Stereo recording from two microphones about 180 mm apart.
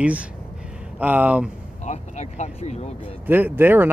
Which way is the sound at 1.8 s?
40° left (ahead or behind).